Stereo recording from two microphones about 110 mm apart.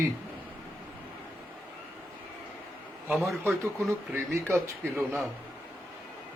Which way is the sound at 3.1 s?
Centre (ahead or behind).